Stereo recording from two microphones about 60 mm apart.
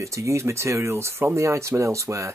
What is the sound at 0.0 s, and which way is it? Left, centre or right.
Speech, right.